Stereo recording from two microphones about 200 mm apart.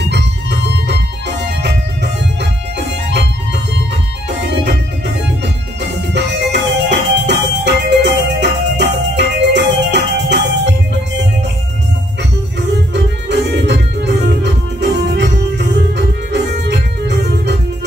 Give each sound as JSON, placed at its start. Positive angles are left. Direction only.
{"t": 0.1, "sound": "organ", "side_deg": -60}
{"t": 5.4, "sound": "music", "side_deg": -60}
{"t": 12.2, "sound": "music", "side_deg": -60}